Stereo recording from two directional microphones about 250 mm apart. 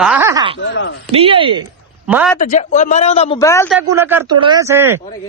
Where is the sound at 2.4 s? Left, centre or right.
Left.